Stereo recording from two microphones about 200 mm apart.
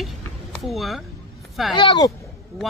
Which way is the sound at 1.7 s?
20° left (ahead or behind).